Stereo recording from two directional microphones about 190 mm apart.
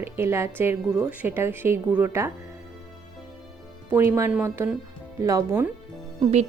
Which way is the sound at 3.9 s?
15° right (ahead or behind).